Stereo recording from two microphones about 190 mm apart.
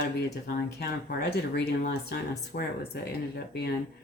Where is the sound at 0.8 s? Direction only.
60° left (ahead or behind).